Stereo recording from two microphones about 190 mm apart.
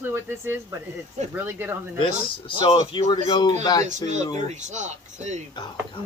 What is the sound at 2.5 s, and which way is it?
Speech, 25° left (ahead or behind).